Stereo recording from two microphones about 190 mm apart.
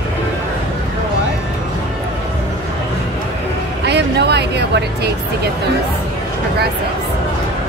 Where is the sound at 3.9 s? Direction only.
65° right (ahead or behind).